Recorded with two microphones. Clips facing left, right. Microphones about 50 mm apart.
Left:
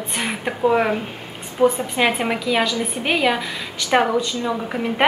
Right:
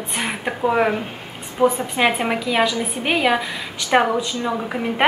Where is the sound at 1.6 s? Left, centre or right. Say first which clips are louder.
Even; right.